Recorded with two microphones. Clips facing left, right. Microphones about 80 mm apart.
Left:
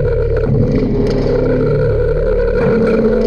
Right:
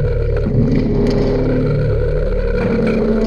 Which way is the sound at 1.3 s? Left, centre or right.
Left.